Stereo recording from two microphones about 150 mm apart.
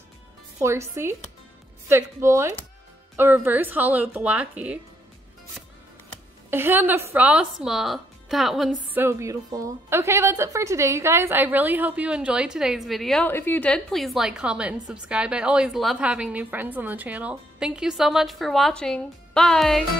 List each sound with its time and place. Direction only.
0.6 s a woman's voice: 20° right (ahead or behind)
6.5 s a woman's voice: 15° right (ahead or behind)
8.9 s a woman's voice: 15° right (ahead or behind); by 13.3 s centre (ahead or behind)
13.3 s a woman's voice: 15° left (ahead or behind)